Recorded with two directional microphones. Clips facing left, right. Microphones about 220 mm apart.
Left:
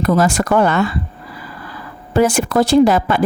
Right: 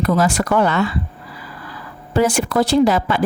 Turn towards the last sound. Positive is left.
turn(degrees=50)  # may be behind; listen again after turning